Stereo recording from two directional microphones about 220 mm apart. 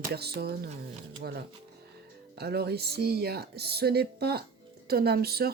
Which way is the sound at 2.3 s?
45° right (ahead or behind).